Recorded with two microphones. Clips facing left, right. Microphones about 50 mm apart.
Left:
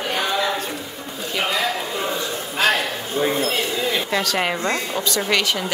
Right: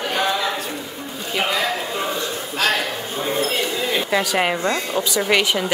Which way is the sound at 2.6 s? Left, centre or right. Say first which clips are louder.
Left 1 dB; centre.